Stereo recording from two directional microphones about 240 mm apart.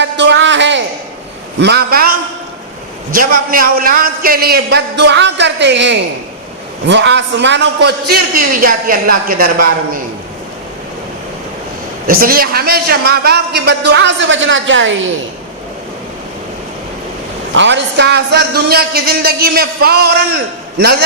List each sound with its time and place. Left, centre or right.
0.0 s a sound: right
1.5 s a man's voice: right
3.2 s a man's voice: right
12.0 s a man's voice: right
17.5 s a man's voice: right